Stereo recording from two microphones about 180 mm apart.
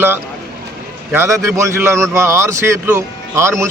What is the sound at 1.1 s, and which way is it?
Speech, 15° right (ahead or behind).